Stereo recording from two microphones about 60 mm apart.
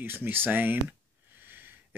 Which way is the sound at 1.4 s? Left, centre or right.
Right.